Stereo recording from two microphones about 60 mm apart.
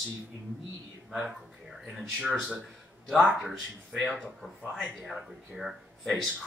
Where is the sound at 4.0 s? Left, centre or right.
Centre.